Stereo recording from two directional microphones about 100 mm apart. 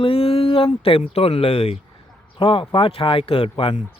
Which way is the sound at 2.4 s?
60° left (ahead or behind).